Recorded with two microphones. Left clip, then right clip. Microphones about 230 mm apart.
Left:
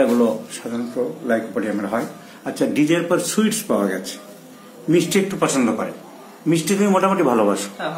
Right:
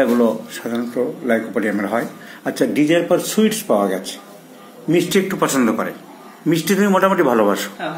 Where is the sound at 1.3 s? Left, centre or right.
Centre.